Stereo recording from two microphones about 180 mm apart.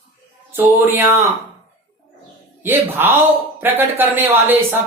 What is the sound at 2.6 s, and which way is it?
Speech, 10° right (ahead or behind).